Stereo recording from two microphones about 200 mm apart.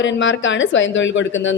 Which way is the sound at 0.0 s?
65° left (ahead or behind).